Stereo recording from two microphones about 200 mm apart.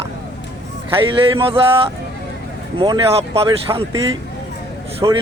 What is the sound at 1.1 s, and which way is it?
Speech, 25° right (ahead or behind).